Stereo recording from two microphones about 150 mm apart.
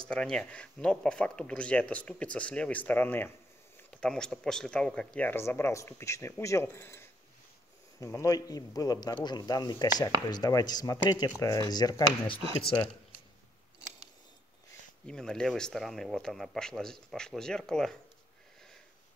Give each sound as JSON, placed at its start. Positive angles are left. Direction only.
{"t": 0.1, "sound": "speech", "side_deg": 5}
{"t": 15.0, "sound": "speech", "side_deg": 5}